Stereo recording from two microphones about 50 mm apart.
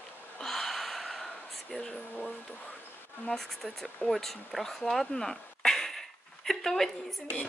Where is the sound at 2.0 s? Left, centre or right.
Left.